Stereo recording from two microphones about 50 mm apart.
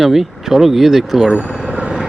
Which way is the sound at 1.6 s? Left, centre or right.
Centre.